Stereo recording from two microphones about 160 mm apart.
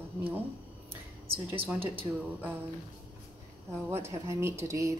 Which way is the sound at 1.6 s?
10° right (ahead or behind).